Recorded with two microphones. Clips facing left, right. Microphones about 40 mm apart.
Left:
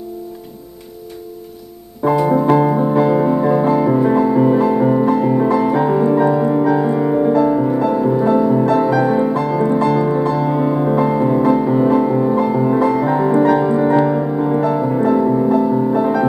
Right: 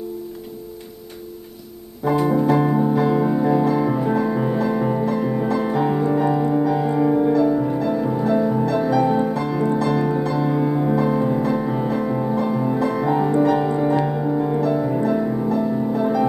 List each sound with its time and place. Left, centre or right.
2.8 s music: left
4.3 s music: centre
4.6 s music: left
6.3 s music: left
8.6 s music: left
13.4 s music: left
13.7 s music: left